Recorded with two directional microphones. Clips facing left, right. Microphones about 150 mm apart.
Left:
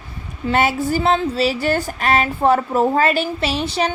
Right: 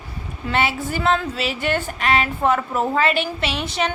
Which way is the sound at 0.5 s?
40° left (ahead or behind).